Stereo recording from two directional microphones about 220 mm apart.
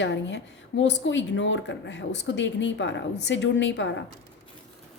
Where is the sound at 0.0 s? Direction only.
55° left (ahead or behind).